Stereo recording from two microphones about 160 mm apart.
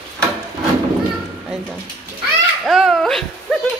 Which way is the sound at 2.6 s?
Centre (ahead or behind).